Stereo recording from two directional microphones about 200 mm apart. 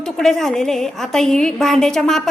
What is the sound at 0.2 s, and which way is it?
A woman's voice, centre (ahead or behind).